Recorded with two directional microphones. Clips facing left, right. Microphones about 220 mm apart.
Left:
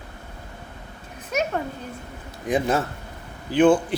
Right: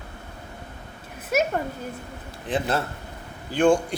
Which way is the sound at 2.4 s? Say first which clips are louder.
Left 3 dB; 10° left (ahead or behind).